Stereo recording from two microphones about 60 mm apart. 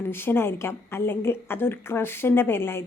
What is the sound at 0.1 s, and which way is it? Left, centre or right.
A woman's voice, left.